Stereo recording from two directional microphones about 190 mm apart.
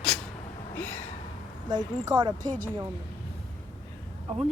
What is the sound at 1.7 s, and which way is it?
Speech, 20° right (ahead or behind).